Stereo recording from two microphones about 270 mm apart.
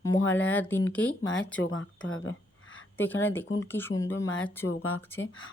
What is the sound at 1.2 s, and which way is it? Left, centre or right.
Speech, left.